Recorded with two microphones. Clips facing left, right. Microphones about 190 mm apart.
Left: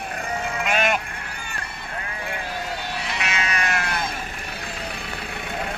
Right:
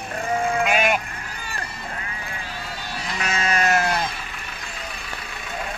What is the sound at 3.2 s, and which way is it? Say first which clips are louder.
Sheep: right 6 dB; 35° right (ahead or behind).